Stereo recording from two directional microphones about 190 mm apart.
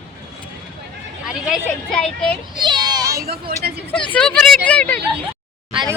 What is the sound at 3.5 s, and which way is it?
Speech, 55° right (ahead or behind).